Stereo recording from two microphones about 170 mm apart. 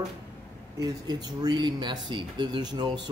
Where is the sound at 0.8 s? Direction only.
25° right (ahead or behind).